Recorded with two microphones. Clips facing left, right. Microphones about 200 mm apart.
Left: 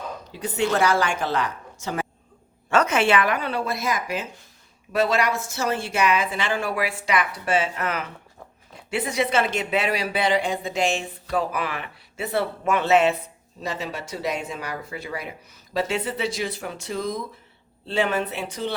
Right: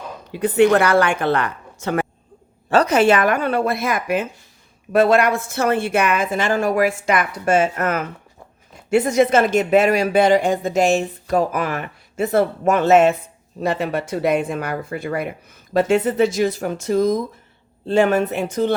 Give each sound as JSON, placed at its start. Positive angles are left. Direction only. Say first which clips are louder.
{"t": 0.3, "sound": "a woman's voice", "louder": "right 10 dB", "side_deg": -60}
{"t": 2.6, "sound": "speech", "louder": "right 6 dB", "side_deg": -35}
{"t": 13.6, "sound": "speech", "louder": "right 9 dB", "side_deg": -55}